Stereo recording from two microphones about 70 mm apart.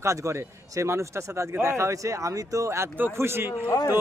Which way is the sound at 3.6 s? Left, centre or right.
Left.